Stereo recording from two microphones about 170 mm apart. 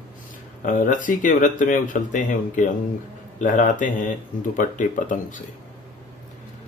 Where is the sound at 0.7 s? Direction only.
50° left (ahead or behind).